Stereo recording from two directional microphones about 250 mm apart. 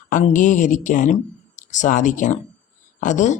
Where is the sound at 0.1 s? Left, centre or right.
Left.